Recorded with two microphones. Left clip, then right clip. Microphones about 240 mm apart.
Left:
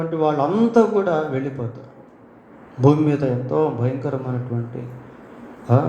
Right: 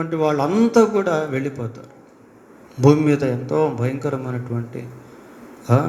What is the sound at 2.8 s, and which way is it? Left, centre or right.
A man's voice, right.